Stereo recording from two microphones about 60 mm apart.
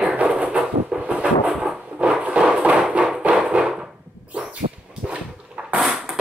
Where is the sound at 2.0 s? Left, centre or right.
Centre.